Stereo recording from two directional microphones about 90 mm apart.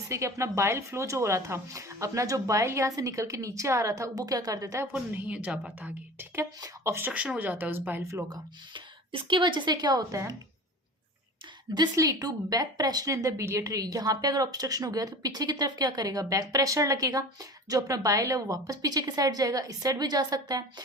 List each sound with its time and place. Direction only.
0.1 s speech: 35° right (ahead or behind)
4.9 s speech: 20° right (ahead or behind)
6.1 s speech: 30° right (ahead or behind)
7.1 s speech: 15° right (ahead or behind)
8.7 s a woman's voice: 65° right (ahead or behind); by 10.3 s 35° right (ahead or behind)
11.9 s a woman's voice: 40° right (ahead or behind)